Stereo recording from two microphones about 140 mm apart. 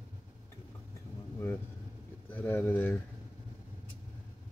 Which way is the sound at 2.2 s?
10° left (ahead or behind).